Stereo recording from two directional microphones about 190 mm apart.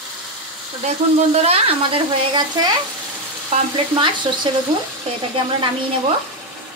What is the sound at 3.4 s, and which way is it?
Frying, 30° right (ahead or behind).